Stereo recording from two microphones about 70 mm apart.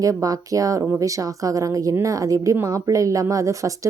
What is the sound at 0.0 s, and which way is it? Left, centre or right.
A woman's voice, right.